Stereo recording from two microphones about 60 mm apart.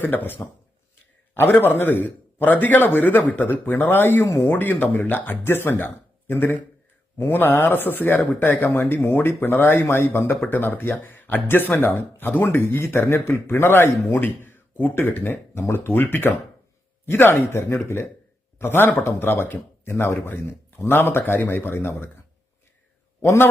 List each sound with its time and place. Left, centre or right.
0.0 s a man's voice: left
18.6 s a man's voice: left